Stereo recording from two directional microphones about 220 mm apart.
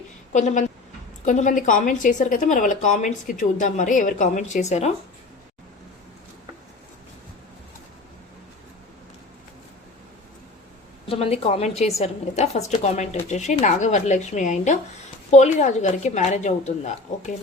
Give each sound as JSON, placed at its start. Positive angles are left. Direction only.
{"t": 0.3, "sound": "a woman's voice", "side_deg": 35}
{"t": 11.1, "sound": "a woman's voice", "side_deg": 25}